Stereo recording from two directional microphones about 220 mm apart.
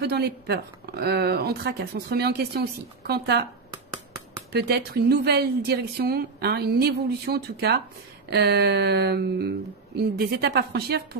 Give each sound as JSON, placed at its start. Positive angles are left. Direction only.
{"t": 0.0, "sound": "speech", "side_deg": -45}
{"t": 4.5, "sound": "speech", "side_deg": -50}